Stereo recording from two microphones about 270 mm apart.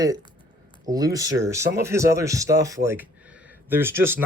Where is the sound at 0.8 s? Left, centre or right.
Centre.